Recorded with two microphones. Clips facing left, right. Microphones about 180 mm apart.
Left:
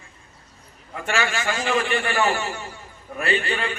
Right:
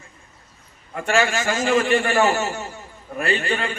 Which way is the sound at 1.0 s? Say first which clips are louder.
Right 4 dB; 40° right (ahead or behind).